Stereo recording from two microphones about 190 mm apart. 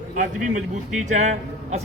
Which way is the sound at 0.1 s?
45° right (ahead or behind).